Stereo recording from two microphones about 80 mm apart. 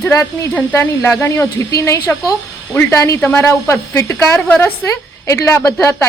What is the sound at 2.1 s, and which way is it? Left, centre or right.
Speech, left.